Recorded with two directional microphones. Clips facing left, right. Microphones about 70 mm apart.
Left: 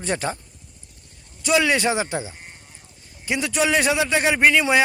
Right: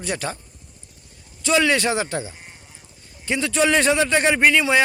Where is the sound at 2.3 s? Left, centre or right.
Centre.